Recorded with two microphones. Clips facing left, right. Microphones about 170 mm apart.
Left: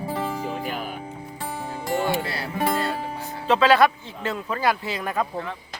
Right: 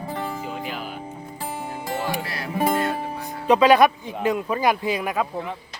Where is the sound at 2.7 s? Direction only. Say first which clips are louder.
Right 2 dB; 20° right (ahead or behind).